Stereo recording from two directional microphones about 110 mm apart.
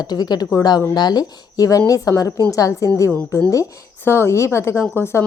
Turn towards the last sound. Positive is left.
turn(degrees=20)  # may be behind; listen again after turning